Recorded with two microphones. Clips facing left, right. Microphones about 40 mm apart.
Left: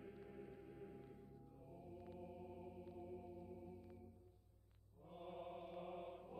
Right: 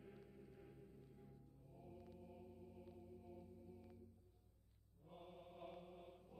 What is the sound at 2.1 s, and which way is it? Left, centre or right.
Mantra, left.